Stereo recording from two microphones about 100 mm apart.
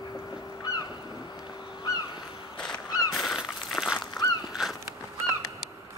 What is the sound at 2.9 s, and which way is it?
Honk, 40° left (ahead or behind).